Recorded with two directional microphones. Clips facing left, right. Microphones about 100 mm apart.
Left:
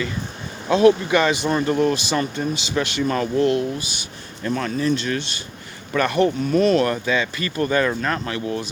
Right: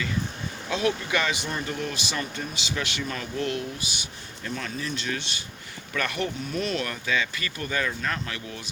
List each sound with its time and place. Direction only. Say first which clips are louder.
0.7 s speech: left 11 dB; 30° left (ahead or behind)
1.5 s speech: left 11 dB; 60° left (ahead or behind)
1.7 s speech: left 11 dB; 35° left (ahead or behind)
4.4 s speech: left 11 dB; 45° left (ahead or behind)
7.0 s speech: left 6 dB; 25° left (ahead or behind)